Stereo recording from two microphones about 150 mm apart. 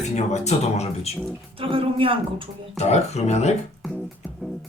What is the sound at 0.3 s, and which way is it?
Speech, 50° left (ahead or behind).